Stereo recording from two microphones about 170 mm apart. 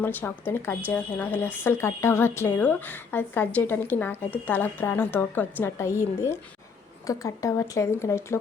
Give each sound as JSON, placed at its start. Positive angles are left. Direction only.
{"t": 0.0, "sound": "a woman's voice", "side_deg": 10}